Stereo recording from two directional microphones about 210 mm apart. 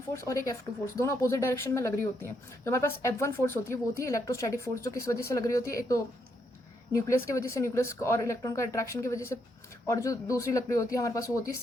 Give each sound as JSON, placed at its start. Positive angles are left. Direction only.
{"t": 0.1, "sound": "a woman's voice", "side_deg": 15}